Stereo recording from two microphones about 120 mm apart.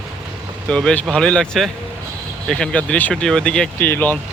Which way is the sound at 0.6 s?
10° left (ahead or behind).